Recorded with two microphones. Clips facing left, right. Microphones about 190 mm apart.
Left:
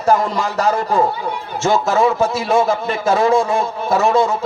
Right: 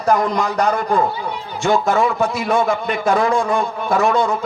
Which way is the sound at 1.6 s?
40° left (ahead or behind).